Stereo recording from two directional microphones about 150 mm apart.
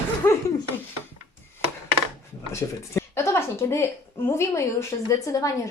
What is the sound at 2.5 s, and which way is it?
A woman's voice, 20° left (ahead or behind).